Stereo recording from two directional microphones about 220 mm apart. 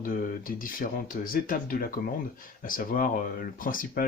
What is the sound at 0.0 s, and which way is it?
Speech, 40° left (ahead or behind).